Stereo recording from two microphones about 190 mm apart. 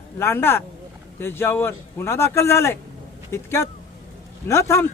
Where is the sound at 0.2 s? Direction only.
15° left (ahead or behind).